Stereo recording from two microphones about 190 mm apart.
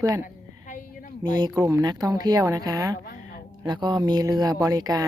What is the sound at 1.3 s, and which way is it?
Speech, 20° right (ahead or behind).